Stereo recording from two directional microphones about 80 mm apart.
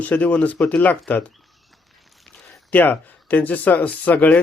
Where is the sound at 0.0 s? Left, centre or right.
Centre.